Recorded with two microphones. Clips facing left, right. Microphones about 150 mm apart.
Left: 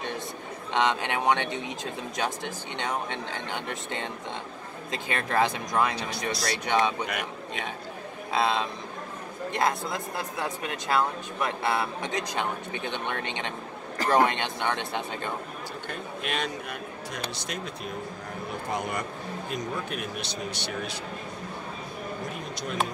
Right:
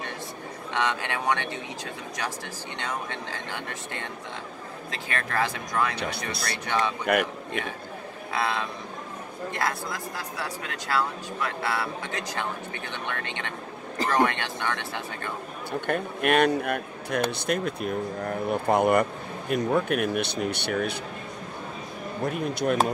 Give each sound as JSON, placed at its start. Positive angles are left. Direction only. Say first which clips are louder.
{"t": 0.7, "sound": "speech", "louder": "left 2 dB", "side_deg": 20}
{"t": 5.9, "sound": "speech", "louder": "even", "side_deg": -65}
{"t": 6.6, "sound": "speech", "louder": "left 2 dB", "side_deg": 20}
{"t": 7.1, "sound": "a man's voice", "louder": "right 9 dB", "side_deg": -55}
{"t": 8.3, "sound": "speech", "louder": "left 2 dB", "side_deg": 20}
{"t": 15.9, "sound": "speech", "louder": "right 10 dB", "side_deg": -60}
{"t": 22.5, "sound": "speech", "louder": "right 9 dB", "side_deg": -60}